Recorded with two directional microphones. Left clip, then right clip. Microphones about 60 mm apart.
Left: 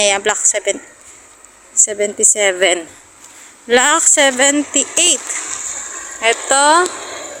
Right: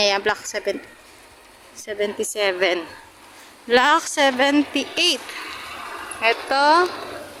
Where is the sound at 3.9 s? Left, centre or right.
Left.